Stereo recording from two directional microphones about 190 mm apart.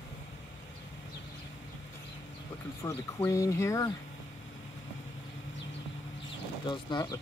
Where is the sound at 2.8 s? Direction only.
15° left (ahead or behind).